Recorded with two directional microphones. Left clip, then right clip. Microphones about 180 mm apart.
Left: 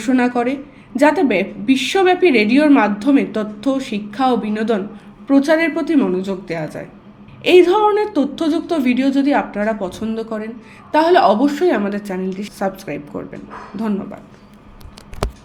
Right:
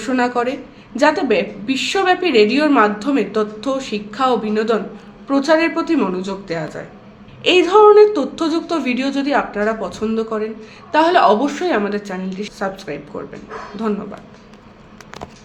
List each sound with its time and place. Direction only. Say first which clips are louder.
0.0 s a woman's voice: left 1 dB; 30° left (ahead or behind)